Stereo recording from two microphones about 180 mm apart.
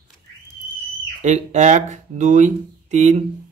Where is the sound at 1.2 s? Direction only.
40° right (ahead or behind).